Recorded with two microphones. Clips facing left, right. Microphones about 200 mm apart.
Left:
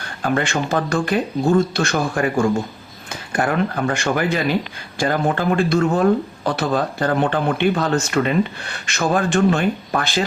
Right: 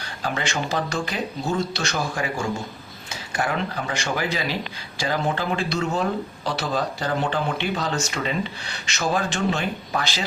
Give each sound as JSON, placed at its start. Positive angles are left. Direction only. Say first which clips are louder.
{"t": 0.0, "sound": "speech", "louder": "left 7 dB", "side_deg": 55}